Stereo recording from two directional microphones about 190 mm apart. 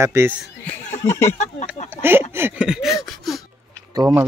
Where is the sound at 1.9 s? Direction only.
10° right (ahead or behind).